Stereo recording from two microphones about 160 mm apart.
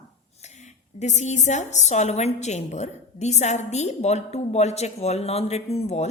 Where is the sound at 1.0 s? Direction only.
45° left (ahead or behind).